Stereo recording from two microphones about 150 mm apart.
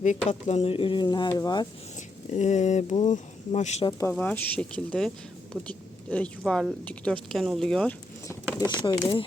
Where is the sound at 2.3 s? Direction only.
50° left (ahead or behind).